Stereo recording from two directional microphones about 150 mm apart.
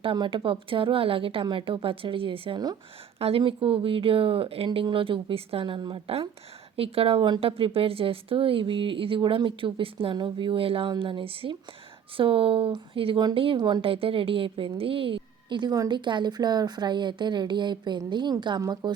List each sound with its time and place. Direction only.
0.0 s a woman's voice: 35° right (ahead or behind)